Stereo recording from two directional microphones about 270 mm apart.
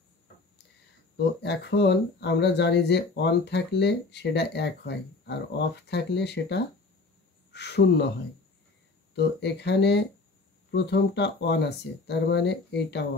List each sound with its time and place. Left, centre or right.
1.1 s speech: left
9.1 s speech: left